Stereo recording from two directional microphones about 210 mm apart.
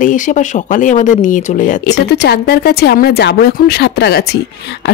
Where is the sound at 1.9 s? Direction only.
50° left (ahead or behind).